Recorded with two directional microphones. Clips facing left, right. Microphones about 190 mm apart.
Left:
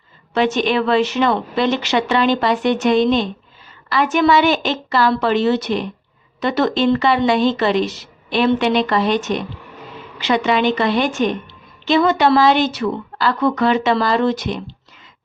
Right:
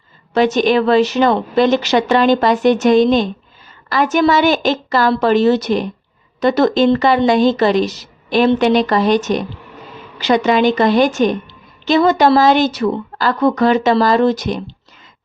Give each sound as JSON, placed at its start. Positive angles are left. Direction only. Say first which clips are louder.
{"t": 0.3, "sound": "a woman's voice", "louder": "right 4 dB", "side_deg": -40}